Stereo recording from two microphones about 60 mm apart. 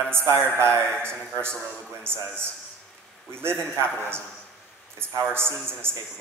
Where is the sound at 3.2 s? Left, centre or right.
Right.